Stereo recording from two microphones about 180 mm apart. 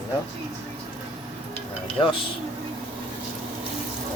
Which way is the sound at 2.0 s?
20° left (ahead or behind).